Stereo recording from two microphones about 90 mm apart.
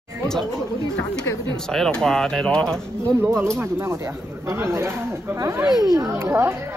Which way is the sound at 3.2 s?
30° right (ahead or behind).